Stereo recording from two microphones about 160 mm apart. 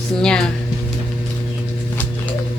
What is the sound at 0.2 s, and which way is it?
Speech, 5° left (ahead or behind).